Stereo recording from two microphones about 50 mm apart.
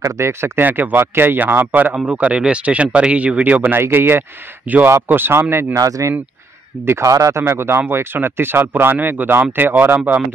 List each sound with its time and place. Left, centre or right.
0.0 s speech: right
0.6 s speech: right
2.0 s speech: right
3.5 s speech: right
5.5 s speech: right
7.0 s speech: right